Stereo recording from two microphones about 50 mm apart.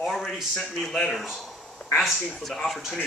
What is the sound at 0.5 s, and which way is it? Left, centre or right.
Speech, centre.